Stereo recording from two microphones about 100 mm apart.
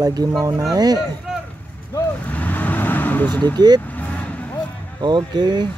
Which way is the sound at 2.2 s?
15° left (ahead or behind).